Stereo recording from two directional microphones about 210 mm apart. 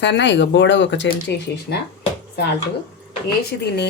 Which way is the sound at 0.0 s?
55° left (ahead or behind).